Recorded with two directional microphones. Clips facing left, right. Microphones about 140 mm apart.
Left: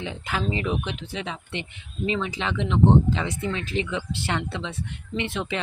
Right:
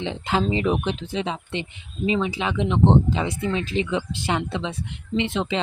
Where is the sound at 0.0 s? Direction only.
25° right (ahead or behind).